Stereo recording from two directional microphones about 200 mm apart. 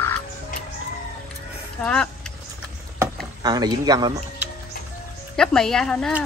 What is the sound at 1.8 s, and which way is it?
Speech, 5° left (ahead or behind).